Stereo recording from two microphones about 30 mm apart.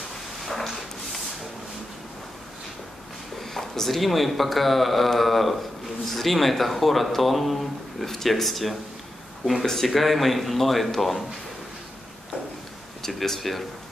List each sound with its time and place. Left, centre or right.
0.5 s a sound: centre
3.3 s speech: centre
9.8 s speech: centre
13.0 s speech: centre